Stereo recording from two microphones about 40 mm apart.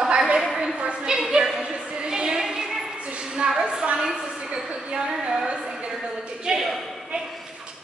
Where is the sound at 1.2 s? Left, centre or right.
Centre.